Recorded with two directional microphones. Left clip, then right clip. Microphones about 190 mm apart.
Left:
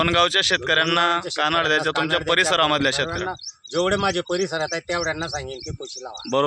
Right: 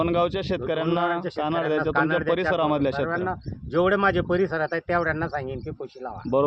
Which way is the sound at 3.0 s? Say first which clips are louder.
Even; 5° left (ahead or behind).